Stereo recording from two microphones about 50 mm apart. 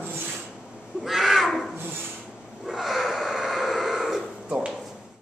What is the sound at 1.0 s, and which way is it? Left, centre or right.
Wild animals, centre.